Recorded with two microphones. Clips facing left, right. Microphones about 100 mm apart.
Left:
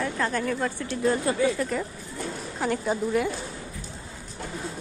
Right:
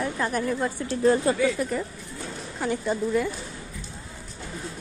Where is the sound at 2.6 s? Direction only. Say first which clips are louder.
Even; 5° left (ahead or behind).